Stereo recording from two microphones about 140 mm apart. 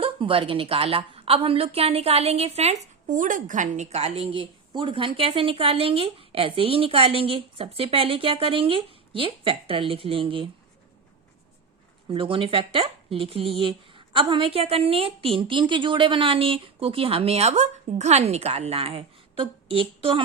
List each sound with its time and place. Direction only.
0.0 s a woman's voice: 40° right (ahead or behind)
12.0 s a woman's voice: 40° right (ahead or behind)